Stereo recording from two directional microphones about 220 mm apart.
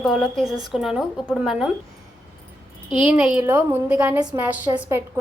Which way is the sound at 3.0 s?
Centre (ahead or behind).